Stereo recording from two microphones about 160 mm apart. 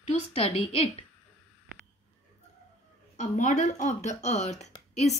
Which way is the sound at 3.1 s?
50° left (ahead or behind).